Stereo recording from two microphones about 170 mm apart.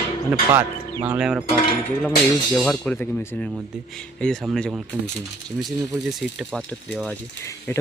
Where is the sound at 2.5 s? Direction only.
5° left (ahead or behind).